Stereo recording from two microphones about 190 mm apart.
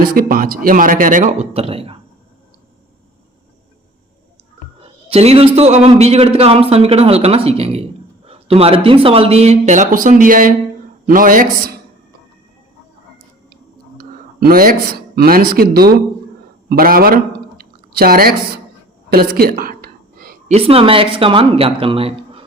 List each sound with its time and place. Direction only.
0.0 s a man's voice: 50° right (ahead or behind); by 2.0 s 30° right (ahead or behind)
4.8 s a man's voice: 30° right (ahead or behind); by 11.8 s 45° right (ahead or behind)
14.0 s a man's voice: 50° right (ahead or behind)
19.1 s a sound: 50° right (ahead or behind)
20.5 s speech: 30° right (ahead or behind)